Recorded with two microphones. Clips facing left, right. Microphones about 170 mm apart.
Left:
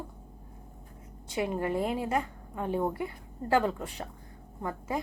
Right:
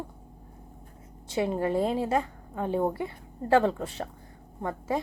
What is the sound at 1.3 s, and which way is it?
A woman's voice, 30° right (ahead or behind).